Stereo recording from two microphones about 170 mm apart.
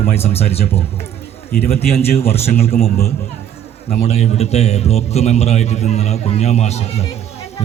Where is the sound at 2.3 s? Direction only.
40° left (ahead or behind).